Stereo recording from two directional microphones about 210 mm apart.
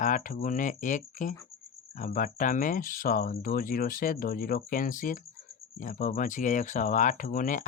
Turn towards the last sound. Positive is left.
turn(degrees=40)  # may be behind; listen again after turning